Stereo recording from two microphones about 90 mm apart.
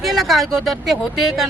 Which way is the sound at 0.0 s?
Centre (ahead or behind).